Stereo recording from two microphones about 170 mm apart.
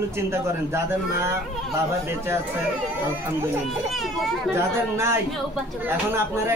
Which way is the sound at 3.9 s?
Centre (ahead or behind).